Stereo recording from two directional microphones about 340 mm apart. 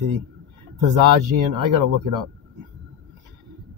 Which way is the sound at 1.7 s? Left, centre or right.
Right.